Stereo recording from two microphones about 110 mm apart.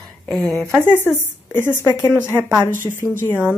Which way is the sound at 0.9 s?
20° left (ahead or behind).